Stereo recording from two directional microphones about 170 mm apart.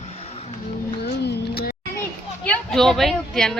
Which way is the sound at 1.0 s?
75° left (ahead or behind).